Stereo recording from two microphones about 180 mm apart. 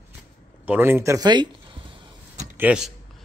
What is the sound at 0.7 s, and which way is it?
Speech, 10° right (ahead or behind).